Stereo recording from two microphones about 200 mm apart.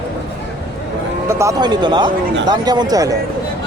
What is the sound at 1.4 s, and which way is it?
Speech, 20° right (ahead or behind).